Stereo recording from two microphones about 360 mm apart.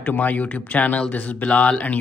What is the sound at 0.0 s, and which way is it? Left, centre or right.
A man's voice, centre.